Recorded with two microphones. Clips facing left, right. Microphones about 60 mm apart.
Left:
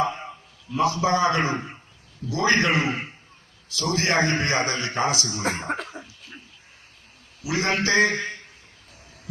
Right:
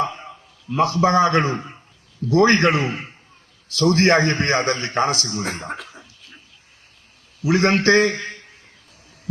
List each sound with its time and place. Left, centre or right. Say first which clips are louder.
0.7 s a man's voice: right 4 dB; right
5.4 s cough: left 1 dB; left
7.4 s a man's voice: right 7 dB; right